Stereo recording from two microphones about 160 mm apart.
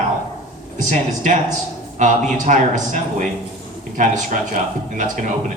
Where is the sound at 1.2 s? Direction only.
50° right (ahead or behind).